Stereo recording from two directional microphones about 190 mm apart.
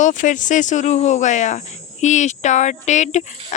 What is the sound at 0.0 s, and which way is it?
Speech, 40° left (ahead or behind).